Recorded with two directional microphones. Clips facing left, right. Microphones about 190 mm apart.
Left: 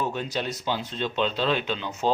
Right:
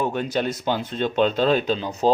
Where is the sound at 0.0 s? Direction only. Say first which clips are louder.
Right 5 dB; 55° right (ahead or behind).